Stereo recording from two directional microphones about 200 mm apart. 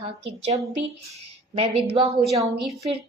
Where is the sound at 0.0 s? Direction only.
25° right (ahead or behind).